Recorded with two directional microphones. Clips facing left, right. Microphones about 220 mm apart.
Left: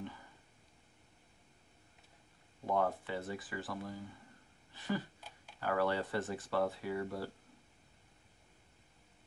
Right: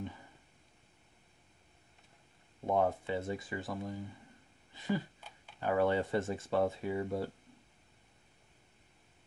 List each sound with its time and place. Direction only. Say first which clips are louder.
2.6 s speech: right 3 dB; 20° right (ahead or behind)
4.7 s a sound: right 3 dB; 15° right (ahead or behind)
5.6 s speech: right 4 dB; 20° right (ahead or behind)